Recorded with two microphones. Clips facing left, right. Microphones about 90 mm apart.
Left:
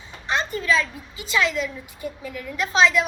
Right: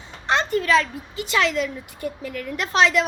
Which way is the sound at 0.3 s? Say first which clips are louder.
Right 3 dB; 60° right (ahead or behind).